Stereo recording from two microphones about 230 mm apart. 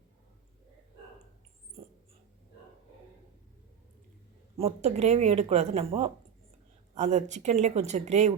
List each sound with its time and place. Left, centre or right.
4.5 s speech: right